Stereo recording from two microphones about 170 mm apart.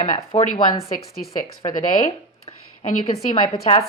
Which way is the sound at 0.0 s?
35° left (ahead or behind).